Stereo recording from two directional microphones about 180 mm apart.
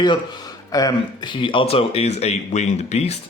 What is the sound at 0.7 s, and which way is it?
A man's voice, 20° left (ahead or behind).